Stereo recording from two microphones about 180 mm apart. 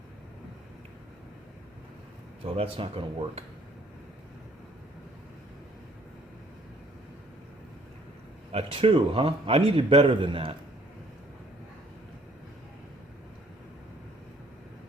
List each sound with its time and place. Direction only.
2.4 s a man's voice: 30° right (ahead or behind)
8.5 s a man's voice: 30° right (ahead or behind)